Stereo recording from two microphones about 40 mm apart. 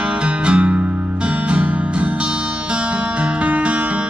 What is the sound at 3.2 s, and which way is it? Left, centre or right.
Music, right.